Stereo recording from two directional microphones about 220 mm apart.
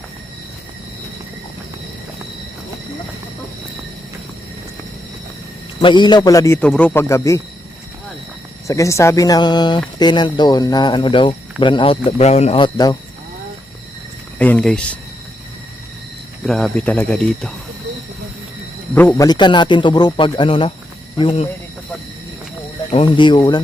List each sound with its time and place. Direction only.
5.8 s a man's voice: 20° left (ahead or behind)
8.6 s a man's voice: 15° left (ahead or behind)
14.3 s speech: 5° left (ahead or behind)
16.5 s speech: centre (ahead or behind)
18.9 s a man's voice: 10° left (ahead or behind)
22.9 s a man's voice: 25° left (ahead or behind)